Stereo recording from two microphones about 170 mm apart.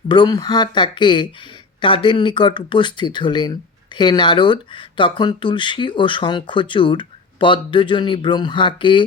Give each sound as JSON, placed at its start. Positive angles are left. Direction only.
{"t": 0.1, "sound": "speech", "side_deg": 25}